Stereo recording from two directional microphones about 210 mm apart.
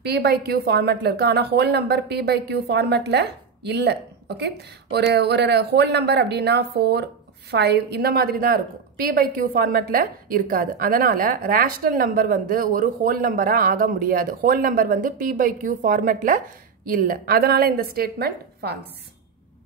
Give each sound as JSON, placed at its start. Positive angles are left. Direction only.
{"t": 0.0, "sound": "a woman's voice", "side_deg": -50}